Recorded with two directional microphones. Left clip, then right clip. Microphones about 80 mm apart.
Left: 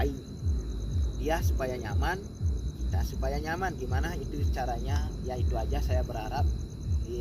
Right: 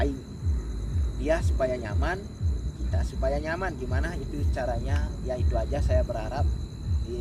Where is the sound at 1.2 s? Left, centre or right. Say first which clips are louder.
Right 5 dB; right.